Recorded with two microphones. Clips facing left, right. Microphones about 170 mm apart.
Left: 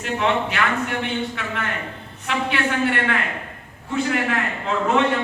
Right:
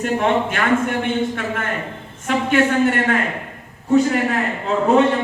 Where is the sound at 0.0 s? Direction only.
45° right (ahead or behind).